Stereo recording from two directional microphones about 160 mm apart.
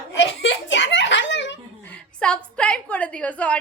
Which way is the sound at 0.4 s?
90° left.